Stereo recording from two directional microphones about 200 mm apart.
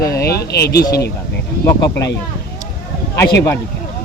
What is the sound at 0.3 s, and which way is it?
Speech, 55° left (ahead or behind).